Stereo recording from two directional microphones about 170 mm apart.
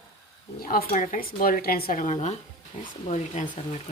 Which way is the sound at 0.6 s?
50° left (ahead or behind).